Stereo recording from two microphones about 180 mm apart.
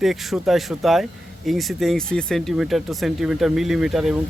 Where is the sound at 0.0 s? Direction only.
Centre (ahead or behind).